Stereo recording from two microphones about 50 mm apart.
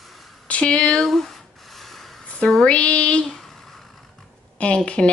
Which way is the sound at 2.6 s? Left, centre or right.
Left.